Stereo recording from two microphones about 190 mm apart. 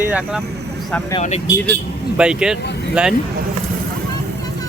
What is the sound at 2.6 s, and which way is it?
Speech, 60° left (ahead or behind).